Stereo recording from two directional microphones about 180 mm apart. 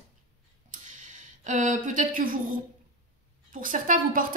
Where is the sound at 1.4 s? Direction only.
45° right (ahead or behind).